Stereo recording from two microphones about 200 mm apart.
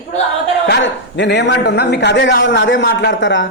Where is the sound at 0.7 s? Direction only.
60° left (ahead or behind).